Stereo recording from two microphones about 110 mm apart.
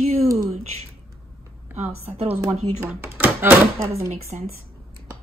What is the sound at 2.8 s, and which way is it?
Speech, 20° right (ahead or behind).